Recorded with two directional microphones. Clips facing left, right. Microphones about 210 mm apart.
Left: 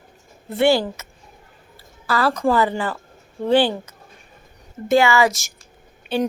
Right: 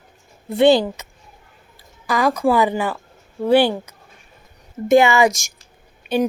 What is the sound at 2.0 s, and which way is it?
A woman's voice, 15° right (ahead or behind).